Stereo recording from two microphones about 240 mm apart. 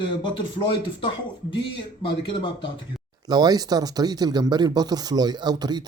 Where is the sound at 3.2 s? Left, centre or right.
Centre.